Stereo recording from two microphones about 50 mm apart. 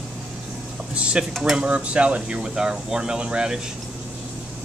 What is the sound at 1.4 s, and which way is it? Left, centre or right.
Speech, centre.